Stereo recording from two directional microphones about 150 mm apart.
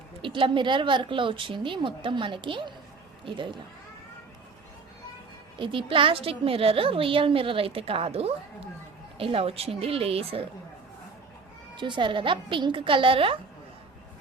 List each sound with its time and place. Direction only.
0.2 s a woman's voice: 35° right (ahead or behind)
5.5 s a woman's voice: 35° right (ahead or behind)
11.8 s a woman's voice: 30° right (ahead or behind)